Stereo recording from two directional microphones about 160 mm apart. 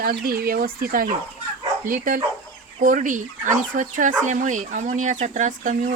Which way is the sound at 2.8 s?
55° right (ahead or behind).